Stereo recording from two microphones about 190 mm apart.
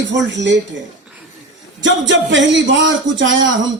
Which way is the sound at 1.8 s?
75° right (ahead or behind).